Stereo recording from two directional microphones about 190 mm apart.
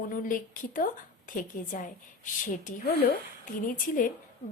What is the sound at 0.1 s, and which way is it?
A woman's voice, 45° left (ahead or behind).